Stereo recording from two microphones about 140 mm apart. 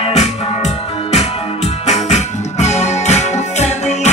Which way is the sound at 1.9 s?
55° left (ahead or behind).